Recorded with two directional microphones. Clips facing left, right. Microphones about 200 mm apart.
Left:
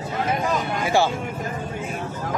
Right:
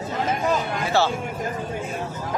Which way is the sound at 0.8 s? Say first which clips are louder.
Left 2 dB; 15° left (ahead or behind).